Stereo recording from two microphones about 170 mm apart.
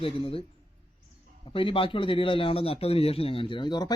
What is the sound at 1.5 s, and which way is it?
A man's voice, 30° left (ahead or behind).